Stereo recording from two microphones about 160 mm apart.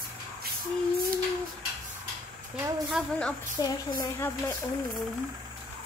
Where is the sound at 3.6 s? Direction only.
25° left (ahead or behind).